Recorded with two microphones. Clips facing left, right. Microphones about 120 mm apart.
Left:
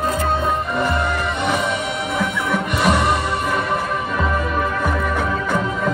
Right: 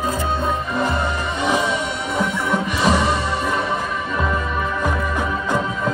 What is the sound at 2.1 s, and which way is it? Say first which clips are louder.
Music: right 1 dB; 5° left (ahead or behind).